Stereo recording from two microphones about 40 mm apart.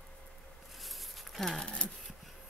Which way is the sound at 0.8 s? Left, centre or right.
Centre.